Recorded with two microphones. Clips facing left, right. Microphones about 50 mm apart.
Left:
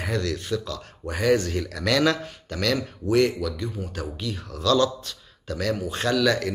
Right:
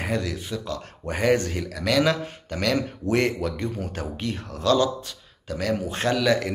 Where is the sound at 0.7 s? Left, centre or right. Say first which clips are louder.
Right 2 dB; right.